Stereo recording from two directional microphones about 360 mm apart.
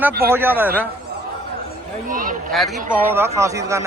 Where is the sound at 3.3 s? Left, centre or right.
Centre.